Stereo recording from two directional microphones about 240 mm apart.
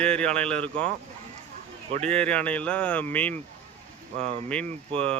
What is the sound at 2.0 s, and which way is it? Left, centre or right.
Speech, centre.